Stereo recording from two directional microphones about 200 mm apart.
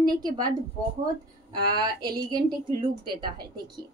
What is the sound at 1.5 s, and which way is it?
A woman's voice, 20° right (ahead or behind).